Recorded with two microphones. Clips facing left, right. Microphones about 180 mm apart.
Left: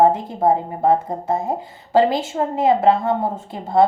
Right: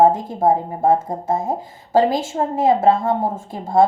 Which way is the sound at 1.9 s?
65° left (ahead or behind).